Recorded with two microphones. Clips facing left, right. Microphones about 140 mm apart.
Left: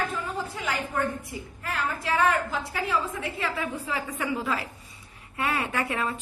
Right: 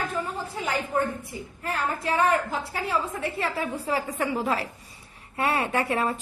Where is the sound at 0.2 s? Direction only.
35° right (ahead or behind).